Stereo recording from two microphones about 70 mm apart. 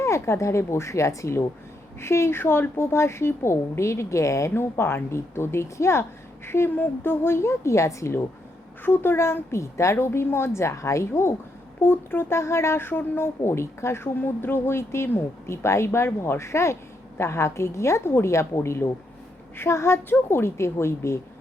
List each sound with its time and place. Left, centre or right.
0.0 s a woman's voice: left
4.5 s speech: left
8.8 s speech: left